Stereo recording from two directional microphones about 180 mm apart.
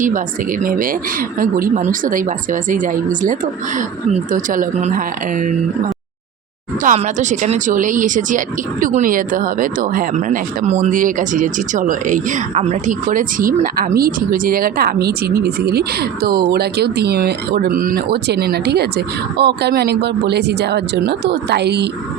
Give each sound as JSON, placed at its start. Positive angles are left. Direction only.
{"t": 0.6, "sound": "speech", "side_deg": -50}
{"t": 6.8, "sound": "speech", "side_deg": -40}